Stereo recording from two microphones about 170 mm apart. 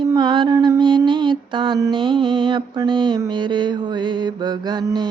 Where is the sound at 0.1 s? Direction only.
25° right (ahead or behind).